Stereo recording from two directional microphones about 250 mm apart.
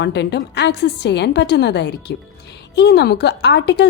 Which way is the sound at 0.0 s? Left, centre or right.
Left.